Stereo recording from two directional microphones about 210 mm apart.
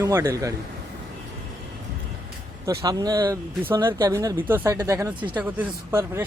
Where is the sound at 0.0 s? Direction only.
15° right (ahead or behind).